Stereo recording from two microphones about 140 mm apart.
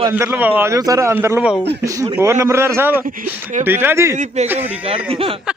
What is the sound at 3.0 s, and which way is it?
Speech, 80° right.